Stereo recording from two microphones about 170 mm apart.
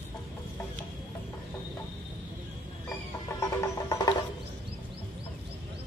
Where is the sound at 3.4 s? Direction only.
20° left (ahead or behind).